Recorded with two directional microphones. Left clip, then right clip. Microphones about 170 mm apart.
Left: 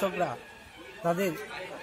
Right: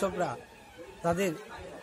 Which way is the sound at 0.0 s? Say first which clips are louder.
Left 1 dB; 20° right (ahead or behind).